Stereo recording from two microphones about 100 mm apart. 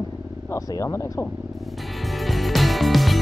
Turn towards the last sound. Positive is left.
turn(degrees=0)  # may be behind; listen again after turning